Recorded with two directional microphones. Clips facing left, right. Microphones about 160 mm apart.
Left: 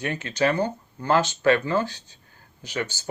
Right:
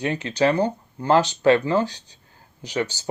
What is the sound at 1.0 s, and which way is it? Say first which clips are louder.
Speech: right 3 dB; 15° right (ahead or behind).